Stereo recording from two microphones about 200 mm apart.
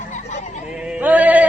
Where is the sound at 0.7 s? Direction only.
5° right (ahead or behind).